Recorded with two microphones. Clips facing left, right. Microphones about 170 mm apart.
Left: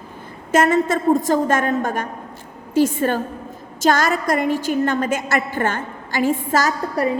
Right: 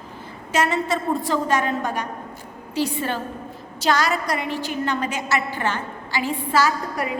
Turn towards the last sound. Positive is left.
turn(degrees=40)  # may be behind; listen again after turning